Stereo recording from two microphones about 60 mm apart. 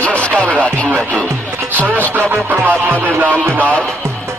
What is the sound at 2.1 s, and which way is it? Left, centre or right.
Speech, right.